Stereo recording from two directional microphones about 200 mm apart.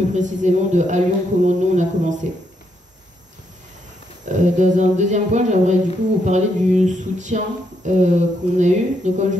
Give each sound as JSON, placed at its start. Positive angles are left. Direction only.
{"t": 0.1, "sound": "speech", "side_deg": -35}
{"t": 4.3, "sound": "speech", "side_deg": -40}